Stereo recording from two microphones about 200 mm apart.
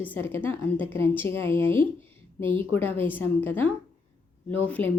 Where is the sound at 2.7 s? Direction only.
10° left (ahead or behind).